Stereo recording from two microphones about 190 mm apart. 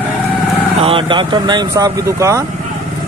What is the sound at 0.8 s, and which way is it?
Speech, 25° right (ahead or behind).